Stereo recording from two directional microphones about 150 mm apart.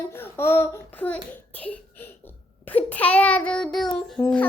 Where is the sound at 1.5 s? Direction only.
10° left (ahead or behind).